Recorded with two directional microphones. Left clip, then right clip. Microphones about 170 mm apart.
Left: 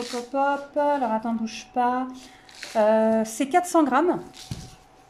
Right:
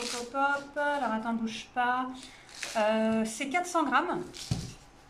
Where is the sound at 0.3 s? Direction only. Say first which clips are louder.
Left 5 dB; 35° left (ahead or behind).